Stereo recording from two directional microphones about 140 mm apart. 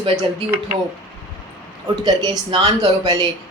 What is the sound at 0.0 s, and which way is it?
Speech, 40° right (ahead or behind).